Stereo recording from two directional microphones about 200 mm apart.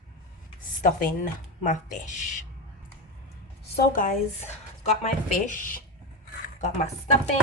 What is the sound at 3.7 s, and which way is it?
Speech, 40° left (ahead or behind).